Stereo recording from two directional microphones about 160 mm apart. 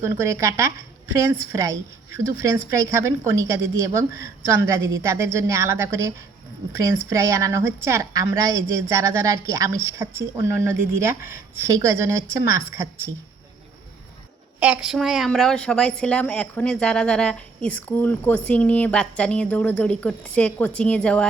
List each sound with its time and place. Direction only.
0.0 s a woman's voice: 15° right (ahead or behind)
14.6 s a woman's voice: 5° right (ahead or behind)